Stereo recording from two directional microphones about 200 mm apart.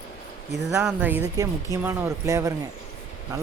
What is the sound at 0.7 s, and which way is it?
Speech, 5° right (ahead or behind).